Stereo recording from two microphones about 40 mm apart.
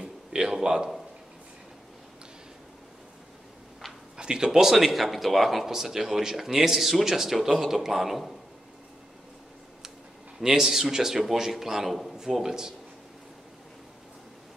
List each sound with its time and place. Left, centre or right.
0.0 s a sound: right
4.2 s a man's voice: centre
10.4 s a man's voice: centre